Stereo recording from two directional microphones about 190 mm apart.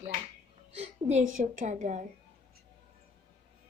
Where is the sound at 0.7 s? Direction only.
35° right (ahead or behind).